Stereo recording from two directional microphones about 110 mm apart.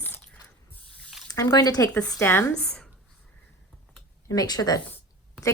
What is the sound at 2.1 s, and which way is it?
Speech, 25° left (ahead or behind).